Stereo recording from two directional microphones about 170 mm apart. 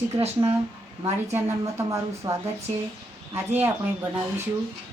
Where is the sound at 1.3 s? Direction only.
15° right (ahead or behind).